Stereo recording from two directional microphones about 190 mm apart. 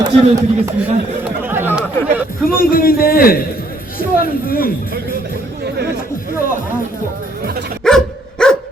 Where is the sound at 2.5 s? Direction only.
50° left (ahead or behind).